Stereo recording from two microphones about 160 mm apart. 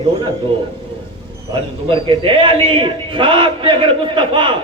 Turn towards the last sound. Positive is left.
turn(degrees=-30)  # may be behind; listen again after turning